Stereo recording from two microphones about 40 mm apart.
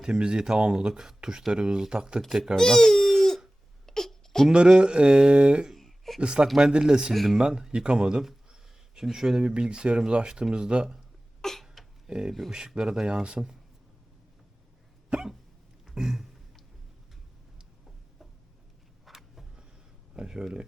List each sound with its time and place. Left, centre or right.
0.0 s speech: right
2.6 s baby cry: centre
3.8 s wail: centre
4.8 s speech: right
5.7 s a sound: centre
6.1 s speech: right
7.1 s speech: centre
7.3 s speech: centre
11.6 s a sound: centre
12.0 s speech: centre
15.9 s a sound: centre
19.0 s vehicle: centre
20.1 s speech: centre